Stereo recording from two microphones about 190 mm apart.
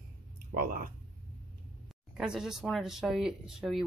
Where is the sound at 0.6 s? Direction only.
45° right (ahead or behind).